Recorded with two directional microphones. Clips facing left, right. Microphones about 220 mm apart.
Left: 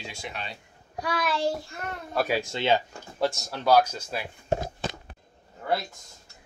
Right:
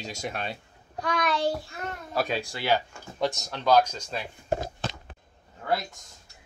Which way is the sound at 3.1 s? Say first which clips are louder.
Left 1 dB; centre (ahead or behind).